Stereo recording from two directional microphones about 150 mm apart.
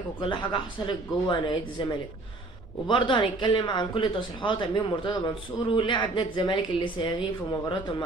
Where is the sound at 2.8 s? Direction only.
35° left (ahead or behind).